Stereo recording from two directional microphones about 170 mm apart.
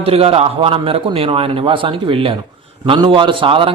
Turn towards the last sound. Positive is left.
turn(degrees=-30)  # may be behind; listen again after turning